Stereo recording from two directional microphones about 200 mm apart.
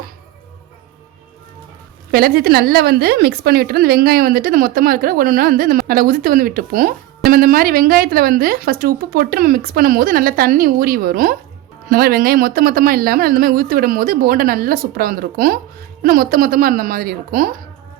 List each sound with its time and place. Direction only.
2.0 s a woman's voice: 50° right (ahead or behind)